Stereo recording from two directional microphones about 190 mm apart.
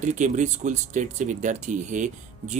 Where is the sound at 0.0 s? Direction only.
40° right (ahead or behind).